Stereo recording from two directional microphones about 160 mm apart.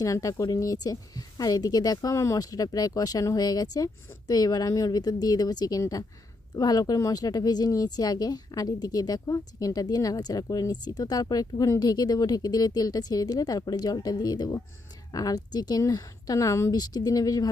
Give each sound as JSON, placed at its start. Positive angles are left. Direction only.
{"t": 0.0, "sound": "speech", "side_deg": 20}